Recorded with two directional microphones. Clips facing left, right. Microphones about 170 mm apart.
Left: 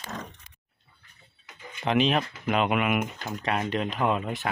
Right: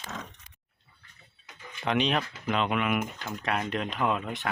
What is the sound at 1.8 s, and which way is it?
Speech, centre (ahead or behind).